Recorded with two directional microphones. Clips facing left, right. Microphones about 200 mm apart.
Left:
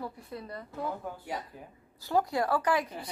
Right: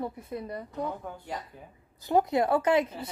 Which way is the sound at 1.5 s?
Centre (ahead or behind).